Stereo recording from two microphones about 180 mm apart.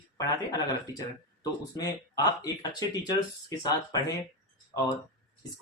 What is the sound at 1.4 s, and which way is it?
Speech, 20° left (ahead or behind).